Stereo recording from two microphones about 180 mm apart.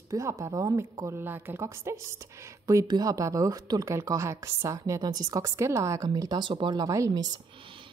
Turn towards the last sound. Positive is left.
turn(degrees=-20)  # may be behind; listen again after turning